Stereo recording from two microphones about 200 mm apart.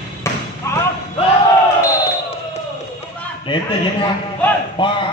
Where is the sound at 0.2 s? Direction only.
15° left (ahead or behind).